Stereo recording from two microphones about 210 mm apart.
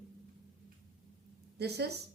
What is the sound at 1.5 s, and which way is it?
Speech, 50° right (ahead or behind).